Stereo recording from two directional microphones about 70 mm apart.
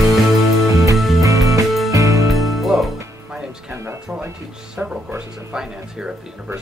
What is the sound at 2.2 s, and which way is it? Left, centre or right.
Music, centre.